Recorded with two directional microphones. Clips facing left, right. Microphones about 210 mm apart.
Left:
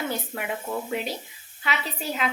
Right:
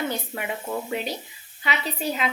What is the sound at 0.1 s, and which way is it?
A woman's voice, centre (ahead or behind).